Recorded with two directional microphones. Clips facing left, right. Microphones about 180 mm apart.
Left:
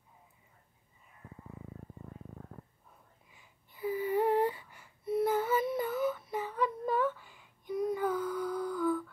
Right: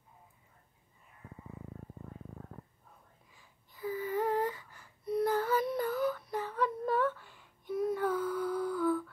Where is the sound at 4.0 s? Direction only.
25° left (ahead or behind).